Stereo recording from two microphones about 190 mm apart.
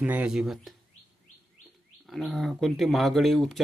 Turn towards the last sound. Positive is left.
turn(degrees=0)  # may be behind; listen again after turning